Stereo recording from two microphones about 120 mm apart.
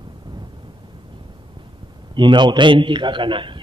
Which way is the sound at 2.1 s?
40° right (ahead or behind).